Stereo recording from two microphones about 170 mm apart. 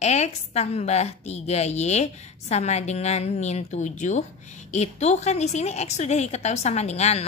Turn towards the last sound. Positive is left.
turn(degrees=40)  # may be behind; listen again after turning